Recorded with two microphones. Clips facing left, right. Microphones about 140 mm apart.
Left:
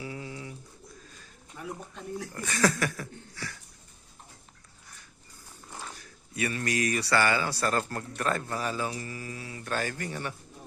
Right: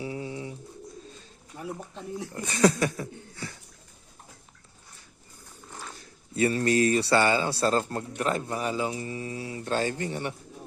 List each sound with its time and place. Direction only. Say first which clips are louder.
0.0 s pigeon: right 5 dB; 25° right (ahead or behind)
1.5 s speech: right 3 dB; 30° right (ahead or behind)
6.3 s speech: right 7 dB; 30° right (ahead or behind)